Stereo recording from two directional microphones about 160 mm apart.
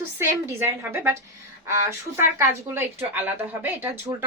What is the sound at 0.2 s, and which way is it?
A woman's voice, 15° right (ahead or behind).